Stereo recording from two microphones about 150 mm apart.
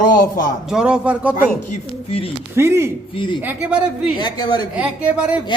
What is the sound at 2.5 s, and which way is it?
Speech, 15° right (ahead or behind).